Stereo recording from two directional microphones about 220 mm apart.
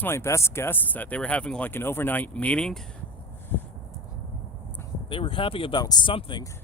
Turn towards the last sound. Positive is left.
turn(degrees=20)  # may be behind; listen again after turning